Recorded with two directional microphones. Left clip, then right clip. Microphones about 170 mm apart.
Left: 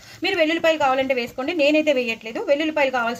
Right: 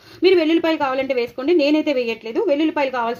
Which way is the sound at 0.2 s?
25° right (ahead or behind).